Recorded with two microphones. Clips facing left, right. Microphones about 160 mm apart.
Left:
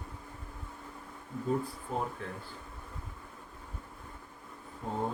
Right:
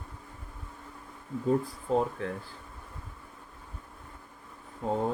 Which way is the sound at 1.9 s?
90° right.